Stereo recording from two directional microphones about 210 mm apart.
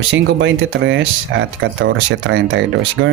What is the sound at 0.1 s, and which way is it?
Speech, 60° right (ahead or behind).